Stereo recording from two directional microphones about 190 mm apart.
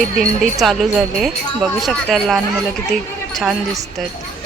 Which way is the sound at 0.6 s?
Centre (ahead or behind).